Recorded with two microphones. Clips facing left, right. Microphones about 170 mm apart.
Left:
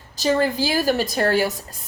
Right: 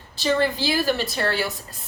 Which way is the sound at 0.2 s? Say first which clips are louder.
Left 2 dB; 40° left (ahead or behind).